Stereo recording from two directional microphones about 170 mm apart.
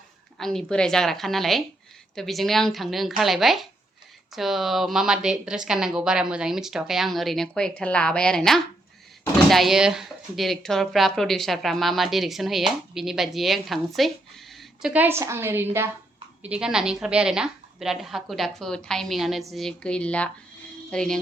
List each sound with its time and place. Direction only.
0.3 s speech: centre (ahead or behind)